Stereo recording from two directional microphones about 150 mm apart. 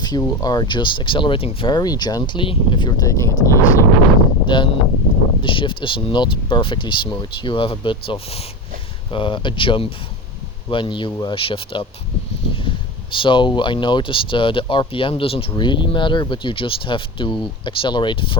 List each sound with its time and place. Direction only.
0.0 s speech: 25° left (ahead or behind)
4.4 s speech: 30° left (ahead or behind)